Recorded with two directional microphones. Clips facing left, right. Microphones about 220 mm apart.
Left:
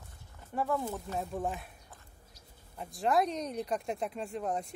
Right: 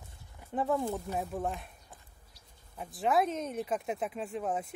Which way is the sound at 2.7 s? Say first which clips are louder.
Even; 5° right (ahead or behind).